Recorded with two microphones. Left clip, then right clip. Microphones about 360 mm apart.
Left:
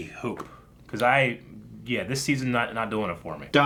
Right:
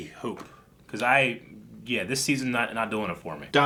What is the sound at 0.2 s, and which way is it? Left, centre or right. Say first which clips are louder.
Speech: left 1 dB; left.